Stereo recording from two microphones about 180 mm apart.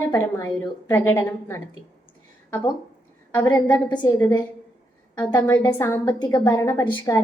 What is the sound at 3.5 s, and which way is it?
A woman's voice, 20° left (ahead or behind).